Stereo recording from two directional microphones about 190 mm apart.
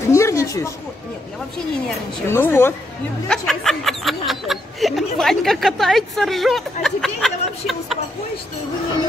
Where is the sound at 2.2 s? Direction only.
10° left (ahead or behind).